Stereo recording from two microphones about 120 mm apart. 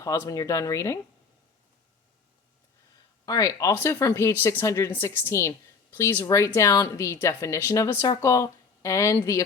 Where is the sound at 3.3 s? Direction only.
30° left (ahead or behind).